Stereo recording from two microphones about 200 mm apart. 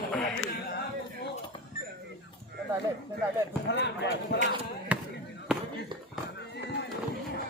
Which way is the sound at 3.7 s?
60° left (ahead or behind).